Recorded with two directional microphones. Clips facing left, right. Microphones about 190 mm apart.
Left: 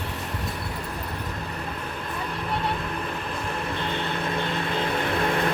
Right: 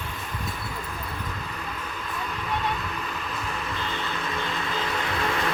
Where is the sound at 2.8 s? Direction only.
55° left (ahead or behind).